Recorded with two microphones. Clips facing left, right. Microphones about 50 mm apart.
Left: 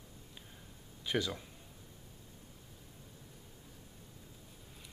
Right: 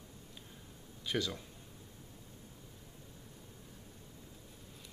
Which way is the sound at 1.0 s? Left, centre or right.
Centre.